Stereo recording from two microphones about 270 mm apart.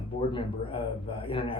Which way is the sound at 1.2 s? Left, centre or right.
Centre.